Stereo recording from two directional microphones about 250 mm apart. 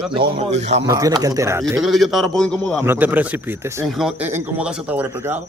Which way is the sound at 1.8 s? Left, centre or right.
Centre.